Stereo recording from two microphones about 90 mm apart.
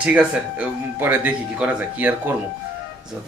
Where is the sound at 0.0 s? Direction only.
15° right (ahead or behind).